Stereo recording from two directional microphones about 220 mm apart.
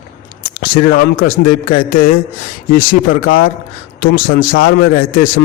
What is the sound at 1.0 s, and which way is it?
A man's voice, 50° left (ahead or behind).